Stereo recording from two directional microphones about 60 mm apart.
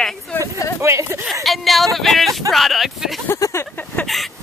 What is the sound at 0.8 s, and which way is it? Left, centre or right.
Speech, right.